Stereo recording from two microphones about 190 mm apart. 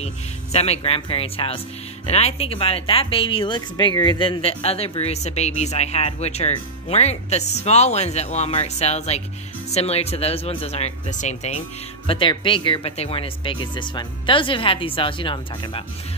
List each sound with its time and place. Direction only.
0.0 s speech: 35° left (ahead or behind)